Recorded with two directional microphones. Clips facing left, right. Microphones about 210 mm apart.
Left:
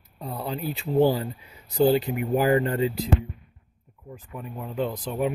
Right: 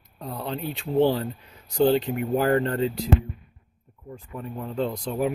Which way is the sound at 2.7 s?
15° left (ahead or behind).